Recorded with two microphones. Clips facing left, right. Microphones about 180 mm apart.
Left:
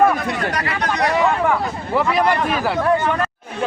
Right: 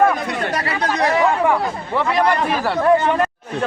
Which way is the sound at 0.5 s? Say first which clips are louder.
Right 1 dB; 30° right (ahead or behind).